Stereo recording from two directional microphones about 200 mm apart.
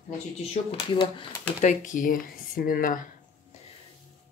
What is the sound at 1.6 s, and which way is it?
Speech, 40° left (ahead or behind).